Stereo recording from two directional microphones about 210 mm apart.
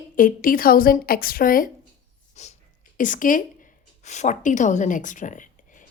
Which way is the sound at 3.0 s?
40° left (ahead or behind).